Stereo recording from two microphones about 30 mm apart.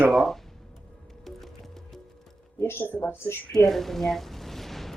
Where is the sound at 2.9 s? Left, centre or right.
Centre.